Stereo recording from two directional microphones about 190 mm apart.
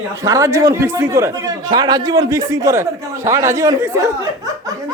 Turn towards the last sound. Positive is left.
turn(degrees=-15)  # may be behind; listen again after turning